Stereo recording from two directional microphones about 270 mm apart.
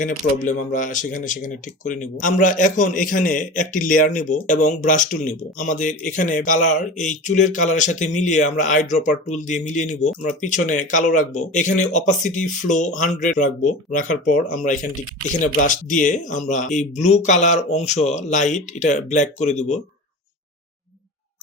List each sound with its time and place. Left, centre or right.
0.0 s speech: left